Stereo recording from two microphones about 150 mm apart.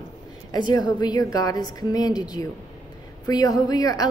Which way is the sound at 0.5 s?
25° left (ahead or behind).